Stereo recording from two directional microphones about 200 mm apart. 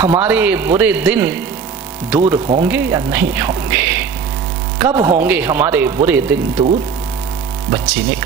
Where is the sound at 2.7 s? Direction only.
10° right (ahead or behind).